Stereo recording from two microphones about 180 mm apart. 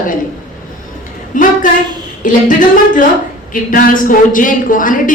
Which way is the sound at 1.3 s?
45° left (ahead or behind).